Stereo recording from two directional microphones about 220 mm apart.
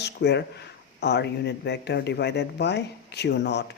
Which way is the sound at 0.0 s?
50° left (ahead or behind).